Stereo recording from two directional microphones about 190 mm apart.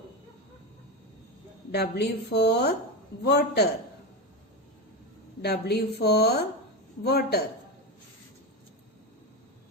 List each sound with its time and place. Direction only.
1.7 s a woman's voice: 60° left (ahead or behind)
5.4 s a woman's voice: 60° left (ahead or behind)